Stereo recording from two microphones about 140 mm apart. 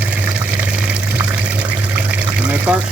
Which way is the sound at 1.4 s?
10° right (ahead or behind).